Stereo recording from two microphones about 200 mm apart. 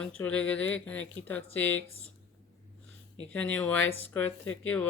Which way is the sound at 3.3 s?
5° left (ahead or behind).